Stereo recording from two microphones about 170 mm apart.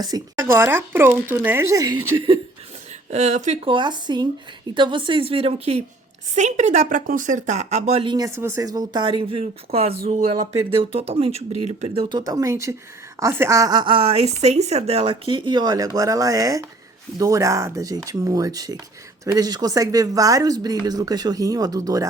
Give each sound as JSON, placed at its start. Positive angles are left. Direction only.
{"t": 0.0, "sound": "speech", "side_deg": -20}
{"t": 3.1, "sound": "speech", "side_deg": -40}
{"t": 8.1, "sound": "a woman's voice", "side_deg": -20}
{"t": 10.1, "sound": "speech", "side_deg": -50}
{"t": 10.8, "sound": "a woman's voice", "side_deg": -35}